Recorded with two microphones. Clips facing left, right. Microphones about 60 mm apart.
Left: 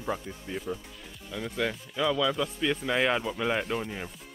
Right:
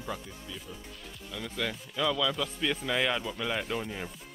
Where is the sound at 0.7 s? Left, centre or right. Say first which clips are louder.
Left 10 dB; left.